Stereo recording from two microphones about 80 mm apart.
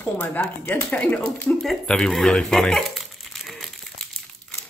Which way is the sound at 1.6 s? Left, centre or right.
Centre.